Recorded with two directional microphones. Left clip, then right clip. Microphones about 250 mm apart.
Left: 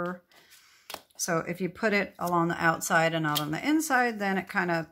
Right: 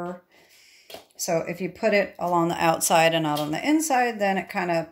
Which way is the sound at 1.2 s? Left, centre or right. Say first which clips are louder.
Right 4 dB; centre.